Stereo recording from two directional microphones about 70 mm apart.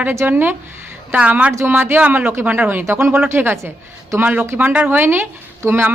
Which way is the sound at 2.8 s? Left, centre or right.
Right.